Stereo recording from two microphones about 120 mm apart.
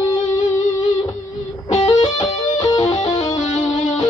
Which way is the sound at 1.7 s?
35° left (ahead or behind).